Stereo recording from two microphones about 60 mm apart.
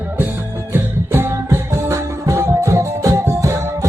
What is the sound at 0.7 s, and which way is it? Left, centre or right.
Music, right.